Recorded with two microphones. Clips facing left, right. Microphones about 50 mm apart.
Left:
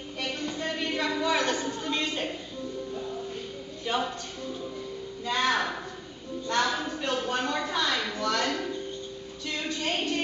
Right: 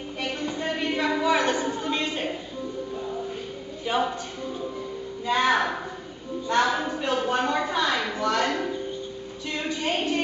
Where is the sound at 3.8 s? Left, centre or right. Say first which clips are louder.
Right 4 dB; centre.